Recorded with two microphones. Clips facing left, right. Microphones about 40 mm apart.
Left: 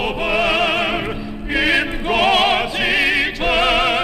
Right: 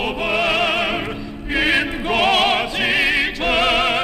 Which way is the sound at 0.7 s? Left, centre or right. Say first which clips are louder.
Left 1 dB; centre.